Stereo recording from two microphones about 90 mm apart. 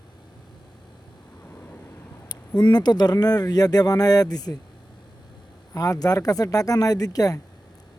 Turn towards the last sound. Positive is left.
turn(degrees=45)  # may be behind; listen again after turning